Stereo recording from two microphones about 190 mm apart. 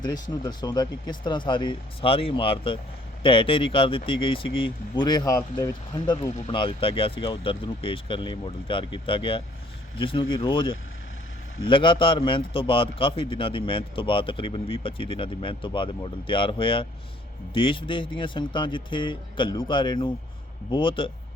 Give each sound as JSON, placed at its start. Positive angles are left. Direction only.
{"t": 0.0, "sound": "a man's voice", "side_deg": 20}